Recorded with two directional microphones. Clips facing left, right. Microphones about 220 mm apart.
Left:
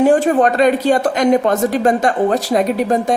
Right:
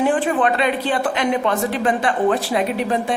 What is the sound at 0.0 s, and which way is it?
Speech, 40° left (ahead or behind).